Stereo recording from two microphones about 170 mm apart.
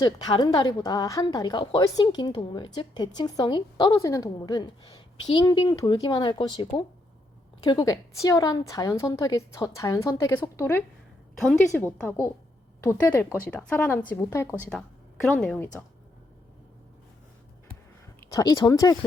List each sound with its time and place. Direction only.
0.0 s speech: 25° left (ahead or behind)
12.0 s a woman's voice: 15° left (ahead or behind)
14.6 s a woman's voice: 5° left (ahead or behind)
18.2 s speech: 20° left (ahead or behind)